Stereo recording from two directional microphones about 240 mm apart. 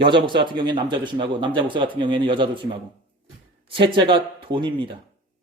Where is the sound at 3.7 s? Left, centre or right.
Right.